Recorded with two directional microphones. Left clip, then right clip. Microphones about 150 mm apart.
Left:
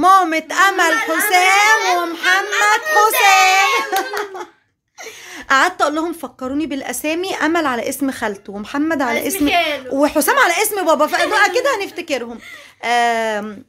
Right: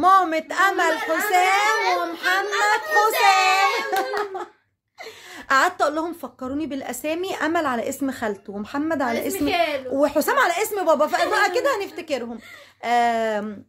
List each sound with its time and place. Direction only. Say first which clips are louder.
0.0 s a sound: left 5 dB; 15° left (ahead or behind)
1.3 s children playing: left 7 dB; 20° left (ahead or behind)
2.1 s child singing: left 6 dB; 15° left (ahead or behind)
2.6 s a sound: left 5 dB; 15° left (ahead or behind)
5.5 s a woman's voice: left 5 dB; 15° left (ahead or behind)
9.3 s a woman's voice: left 6 dB; 30° right (ahead or behind)
9.9 s a woman's voice: left 5 dB; 15° left (ahead or behind)